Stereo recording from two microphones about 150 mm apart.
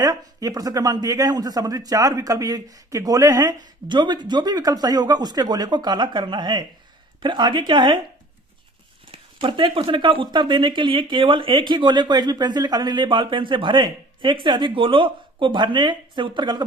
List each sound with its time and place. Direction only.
0.0 s a man's voice: 25° right (ahead or behind)
9.1 s speech: 35° right (ahead or behind)